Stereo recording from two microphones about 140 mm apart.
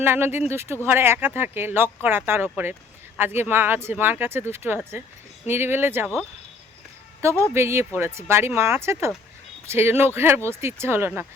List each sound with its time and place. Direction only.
0.0 s speech: 15° right (ahead or behind)
7.4 s speech: 20° right (ahead or behind)